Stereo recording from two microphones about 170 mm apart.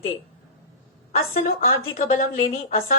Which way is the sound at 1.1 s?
55° left (ahead or behind).